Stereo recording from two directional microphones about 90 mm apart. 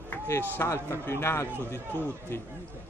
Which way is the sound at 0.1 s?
25° left (ahead or behind).